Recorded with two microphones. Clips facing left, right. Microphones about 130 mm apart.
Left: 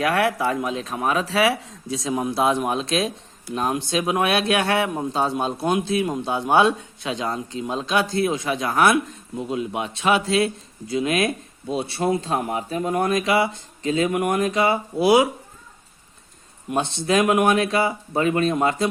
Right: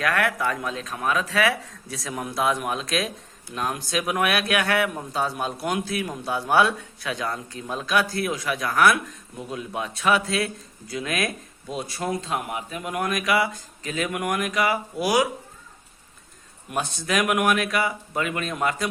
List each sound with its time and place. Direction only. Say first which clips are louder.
0.0 s speech: left 3 dB; 30° left (ahead or behind)
16.6 s speech: left 5 dB; 25° left (ahead or behind)